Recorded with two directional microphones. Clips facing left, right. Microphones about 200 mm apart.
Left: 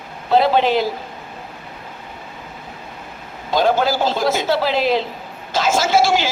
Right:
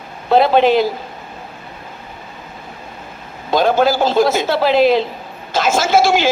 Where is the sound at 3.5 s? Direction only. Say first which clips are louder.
Right 3 dB; 55° right (ahead or behind).